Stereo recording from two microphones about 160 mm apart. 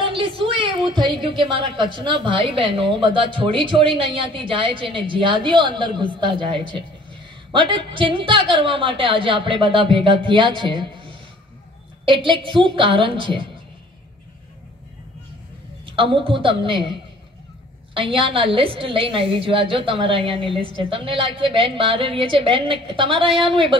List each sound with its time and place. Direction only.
0.0 s a woman's voice: 30° right (ahead or behind)
15.8 s a woman's voice: 35° right (ahead or behind)
17.9 s a woman's voice: 35° right (ahead or behind)